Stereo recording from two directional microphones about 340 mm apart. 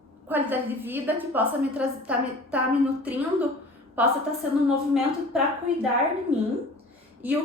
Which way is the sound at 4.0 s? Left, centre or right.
Centre.